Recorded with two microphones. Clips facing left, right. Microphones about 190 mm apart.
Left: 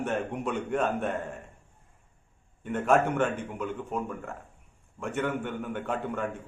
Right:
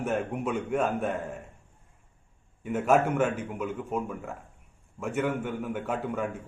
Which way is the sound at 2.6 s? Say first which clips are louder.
Right 1 dB; 5° right (ahead or behind).